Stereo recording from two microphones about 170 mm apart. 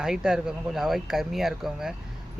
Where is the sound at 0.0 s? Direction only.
5° right (ahead or behind).